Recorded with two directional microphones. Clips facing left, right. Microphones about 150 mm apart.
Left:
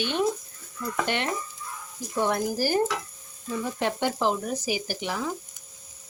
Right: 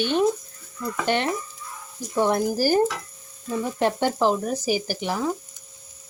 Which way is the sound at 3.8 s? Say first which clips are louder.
Right 5 dB; 40° right (ahead or behind).